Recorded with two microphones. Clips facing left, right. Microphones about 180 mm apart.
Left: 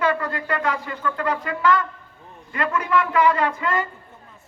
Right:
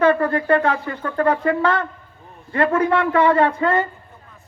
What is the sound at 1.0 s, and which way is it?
Speech, 50° right (ahead or behind).